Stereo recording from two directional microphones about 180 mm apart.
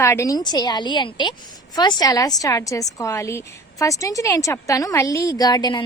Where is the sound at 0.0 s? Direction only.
15° left (ahead or behind).